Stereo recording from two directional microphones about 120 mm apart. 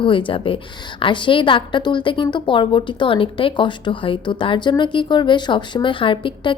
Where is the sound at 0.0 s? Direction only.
45° left (ahead or behind).